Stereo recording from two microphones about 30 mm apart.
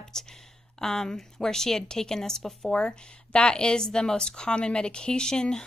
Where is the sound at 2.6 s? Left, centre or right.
Left.